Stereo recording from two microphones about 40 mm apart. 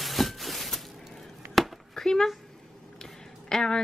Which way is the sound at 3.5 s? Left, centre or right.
Centre.